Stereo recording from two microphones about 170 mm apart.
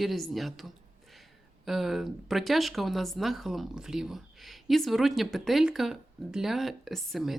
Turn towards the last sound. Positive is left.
turn(degrees=0)  # may be behind; listen again after turning